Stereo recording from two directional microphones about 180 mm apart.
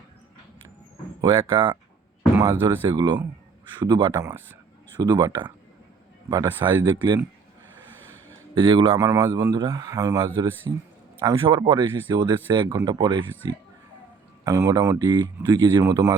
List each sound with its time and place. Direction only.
1.2 s speech: 30° right (ahead or behind)
2.3 s speech: 15° right (ahead or behind)
8.5 s speech: 30° right (ahead or behind)
9.0 s speech: 15° right (ahead or behind)